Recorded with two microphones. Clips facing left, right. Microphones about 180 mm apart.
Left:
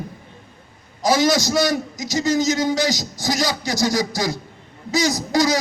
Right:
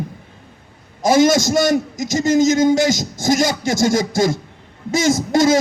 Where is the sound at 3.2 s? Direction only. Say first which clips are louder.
Right 6 dB; 50° right (ahead or behind).